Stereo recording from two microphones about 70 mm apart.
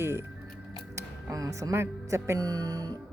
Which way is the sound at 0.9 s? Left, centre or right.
Right.